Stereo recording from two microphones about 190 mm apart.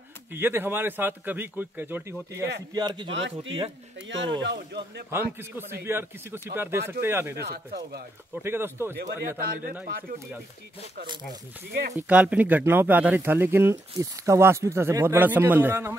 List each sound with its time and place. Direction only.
0.3 s speech: 10° right (ahead or behind)
2.7 s a man's voice: 20° right (ahead or behind)
3.2 s speech: 75° right (ahead or behind)
5.1 s speech: 10° right (ahead or behind)
7.3 s speech: 60° right (ahead or behind)
8.4 s speech: 10° right (ahead or behind)
9.4 s speech: 50° right (ahead or behind)
12.1 s speech: 5° right (ahead or behind)